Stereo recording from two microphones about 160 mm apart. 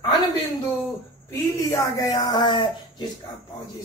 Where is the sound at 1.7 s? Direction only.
20° left (ahead or behind).